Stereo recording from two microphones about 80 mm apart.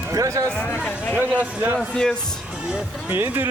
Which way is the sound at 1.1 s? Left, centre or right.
Centre.